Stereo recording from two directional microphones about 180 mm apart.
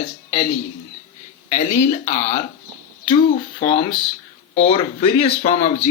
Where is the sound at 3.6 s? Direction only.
25° left (ahead or behind).